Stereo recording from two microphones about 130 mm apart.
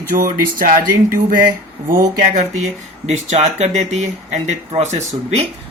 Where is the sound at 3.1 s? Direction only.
60° right (ahead or behind).